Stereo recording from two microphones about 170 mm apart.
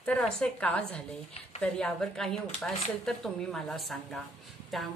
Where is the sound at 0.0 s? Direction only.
5° left (ahead or behind).